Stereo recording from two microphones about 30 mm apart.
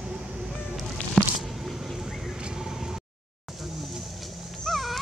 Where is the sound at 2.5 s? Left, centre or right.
Centre.